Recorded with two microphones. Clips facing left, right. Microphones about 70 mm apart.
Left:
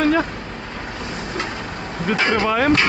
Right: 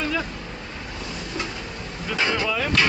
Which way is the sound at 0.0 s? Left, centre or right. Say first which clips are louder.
Left 9 dB; left.